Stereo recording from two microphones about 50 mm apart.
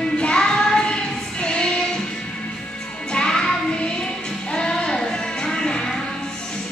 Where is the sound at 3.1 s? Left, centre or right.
Centre.